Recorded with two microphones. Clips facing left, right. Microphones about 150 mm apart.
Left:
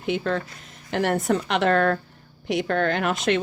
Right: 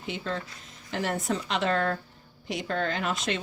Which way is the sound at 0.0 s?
60° left (ahead or behind).